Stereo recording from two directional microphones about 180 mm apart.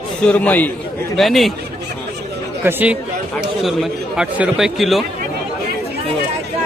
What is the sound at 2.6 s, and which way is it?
A man's voice, 10° right (ahead or behind).